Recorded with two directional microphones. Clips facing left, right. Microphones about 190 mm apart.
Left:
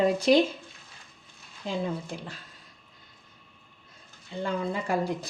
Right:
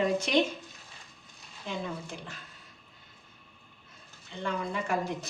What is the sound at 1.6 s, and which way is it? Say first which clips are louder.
Speech: left 5 dB; 35° left (ahead or behind).